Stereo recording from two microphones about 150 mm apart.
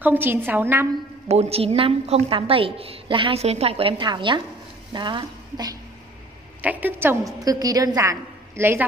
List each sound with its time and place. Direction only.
0.0 s a woman's voice: 15° right (ahead or behind)
1.3 s a woman's voice: 45° right (ahead or behind)
6.6 s a woman's voice: 10° right (ahead or behind)